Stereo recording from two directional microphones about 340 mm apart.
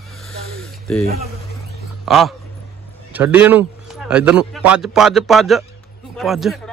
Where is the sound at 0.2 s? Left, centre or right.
Centre.